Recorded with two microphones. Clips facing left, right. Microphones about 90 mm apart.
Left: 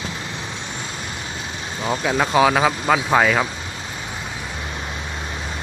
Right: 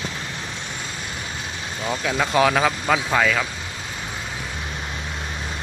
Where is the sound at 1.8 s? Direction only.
20° left (ahead or behind).